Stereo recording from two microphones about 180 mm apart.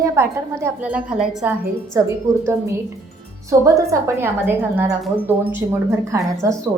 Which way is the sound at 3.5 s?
15° right (ahead or behind).